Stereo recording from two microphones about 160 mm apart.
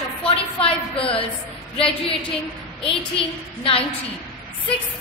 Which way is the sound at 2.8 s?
35° left (ahead or behind).